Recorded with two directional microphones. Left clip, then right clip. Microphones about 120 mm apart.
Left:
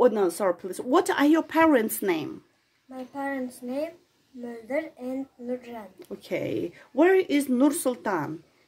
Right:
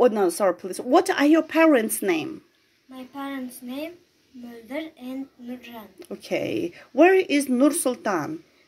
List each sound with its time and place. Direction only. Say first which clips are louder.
0.0 s speech: right 2 dB; 15° left (ahead or behind)
5.7 s speech: right 1 dB; 15° left (ahead or behind)